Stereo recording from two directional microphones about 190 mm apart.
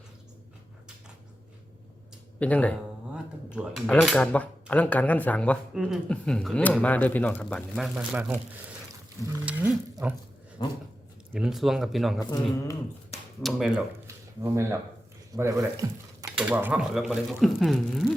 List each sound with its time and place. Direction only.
2.4 s speech: 5° left (ahead or behind)
3.5 s speech: 5° right (ahead or behind)
9.3 s a sound: 10° right (ahead or behind)
10.0 s speech: 10° right (ahead or behind)
11.3 s speech: centre (ahead or behind)
12.2 s speech: 20° left (ahead or behind)
13.4 s speech: 5° right (ahead or behind)
14.4 s speech: 15° right (ahead or behind)
15.4 s stir: 15° right (ahead or behind)
16.5 s speech: 10° right (ahead or behind)